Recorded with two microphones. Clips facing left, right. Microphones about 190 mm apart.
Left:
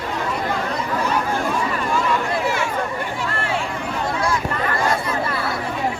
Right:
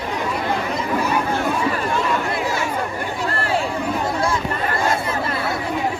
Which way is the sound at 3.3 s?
35° right (ahead or behind).